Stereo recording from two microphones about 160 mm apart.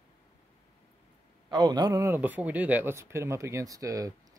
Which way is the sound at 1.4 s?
25° right (ahead or behind).